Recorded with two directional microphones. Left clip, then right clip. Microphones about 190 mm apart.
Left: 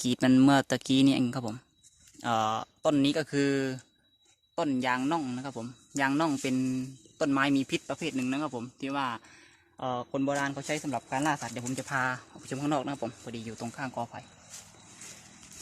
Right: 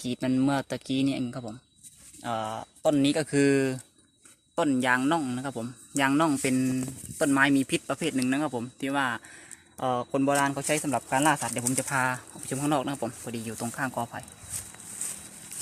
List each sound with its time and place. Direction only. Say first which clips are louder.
0.0 s speech: left 4 dB; 45° left (ahead or behind)
3.0 s speech: right 2 dB; 15° left (ahead or behind)
3.2 s speech: right 5 dB; centre (ahead or behind)
11.9 s speech: right 1 dB; 5° left (ahead or behind)